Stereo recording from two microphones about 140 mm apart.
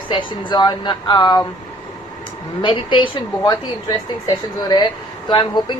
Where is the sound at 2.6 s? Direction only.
35° left (ahead or behind).